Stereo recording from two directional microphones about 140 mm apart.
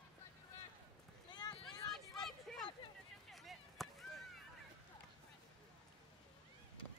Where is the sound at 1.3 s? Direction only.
30° left (ahead or behind).